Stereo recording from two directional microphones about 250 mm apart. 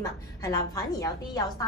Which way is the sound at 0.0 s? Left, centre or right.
Centre.